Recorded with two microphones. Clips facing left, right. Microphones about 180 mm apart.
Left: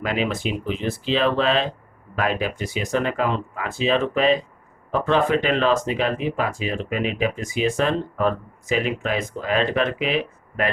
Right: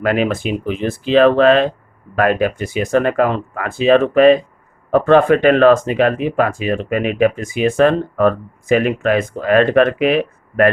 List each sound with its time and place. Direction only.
0.0 s speech: 55° right (ahead or behind)